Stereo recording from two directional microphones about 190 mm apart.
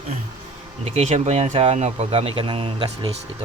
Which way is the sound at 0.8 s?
35° right (ahead or behind).